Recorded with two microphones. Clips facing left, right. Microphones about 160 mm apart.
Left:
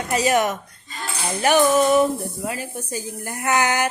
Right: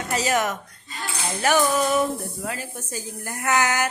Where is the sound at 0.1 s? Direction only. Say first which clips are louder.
Left 4 dB; 15° left (ahead or behind).